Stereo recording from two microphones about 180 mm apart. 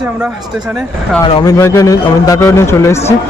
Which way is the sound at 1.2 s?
20° left (ahead or behind).